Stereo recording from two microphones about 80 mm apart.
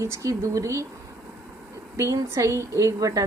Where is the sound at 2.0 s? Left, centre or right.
Right.